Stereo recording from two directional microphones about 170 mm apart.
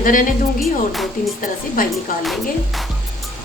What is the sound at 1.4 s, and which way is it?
Speech, 55° left (ahead or behind).